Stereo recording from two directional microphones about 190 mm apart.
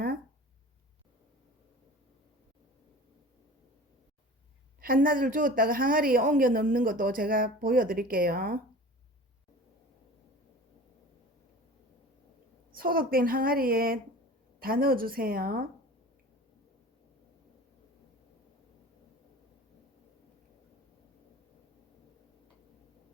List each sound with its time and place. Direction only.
4.8 s a woman's voice: 50° right (ahead or behind)
12.7 s a woman's voice: 50° right (ahead or behind)